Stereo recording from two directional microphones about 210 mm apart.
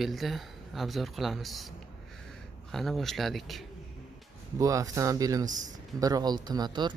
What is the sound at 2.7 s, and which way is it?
Speech, centre (ahead or behind).